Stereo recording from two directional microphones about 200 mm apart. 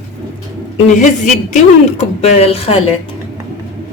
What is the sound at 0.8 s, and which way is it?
Speech, 40° left (ahead or behind).